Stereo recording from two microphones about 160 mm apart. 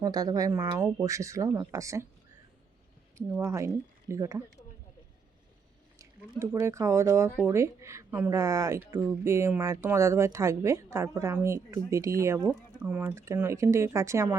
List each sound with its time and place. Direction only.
0.0 s speech: 25° right (ahead or behind)
3.2 s speech: 20° right (ahead or behind)
6.0 s speech: 20° right (ahead or behind)
12.5 s speech: 10° right (ahead or behind)